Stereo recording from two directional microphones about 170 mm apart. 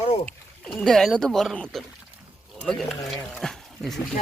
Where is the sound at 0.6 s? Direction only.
5° left (ahead or behind).